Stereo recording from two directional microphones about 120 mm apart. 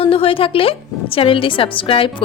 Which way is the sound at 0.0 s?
50° left (ahead or behind).